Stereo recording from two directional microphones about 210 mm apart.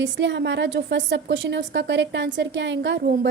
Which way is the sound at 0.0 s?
60° right (ahead or behind).